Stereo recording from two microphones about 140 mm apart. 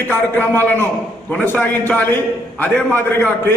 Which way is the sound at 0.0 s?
15° left (ahead or behind).